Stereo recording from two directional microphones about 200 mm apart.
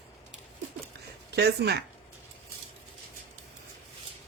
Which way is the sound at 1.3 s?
55° right (ahead or behind).